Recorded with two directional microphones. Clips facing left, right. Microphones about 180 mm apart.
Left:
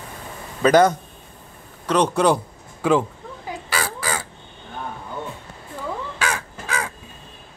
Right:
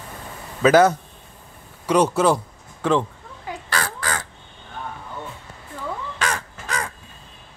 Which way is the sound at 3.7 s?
10° left (ahead or behind).